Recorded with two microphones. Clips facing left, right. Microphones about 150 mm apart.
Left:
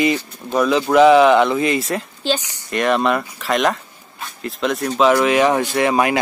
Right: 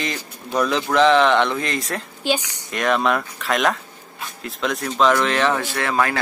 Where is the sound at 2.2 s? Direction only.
10° right (ahead or behind).